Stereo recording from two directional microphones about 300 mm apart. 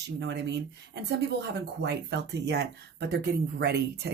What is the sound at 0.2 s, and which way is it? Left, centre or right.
Speech, right.